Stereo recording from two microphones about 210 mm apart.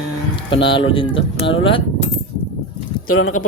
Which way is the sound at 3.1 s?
75° left (ahead or behind).